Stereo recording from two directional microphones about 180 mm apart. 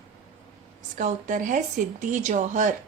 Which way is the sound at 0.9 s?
45° right (ahead or behind).